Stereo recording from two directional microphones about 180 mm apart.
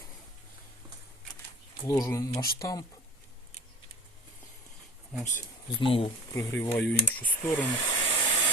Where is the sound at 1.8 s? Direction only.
20° left (ahead or behind).